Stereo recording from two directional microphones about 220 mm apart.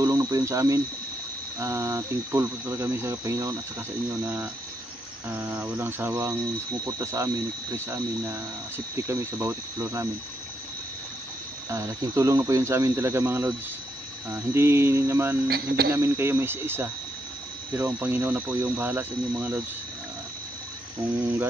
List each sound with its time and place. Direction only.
0.0 s speech: 15° right (ahead or behind)
5.3 s speech: 10° right (ahead or behind)
11.7 s speech: 15° right (ahead or behind)
15.4 s speech: 45° right (ahead or behind)
15.9 s speech: 10° right (ahead or behind)